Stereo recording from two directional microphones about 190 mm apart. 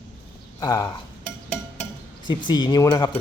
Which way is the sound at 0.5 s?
20° left (ahead or behind).